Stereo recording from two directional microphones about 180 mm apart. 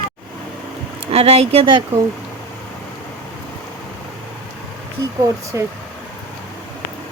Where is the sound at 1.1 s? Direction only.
35° right (ahead or behind).